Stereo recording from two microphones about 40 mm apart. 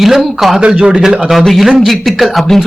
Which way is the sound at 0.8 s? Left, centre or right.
Centre.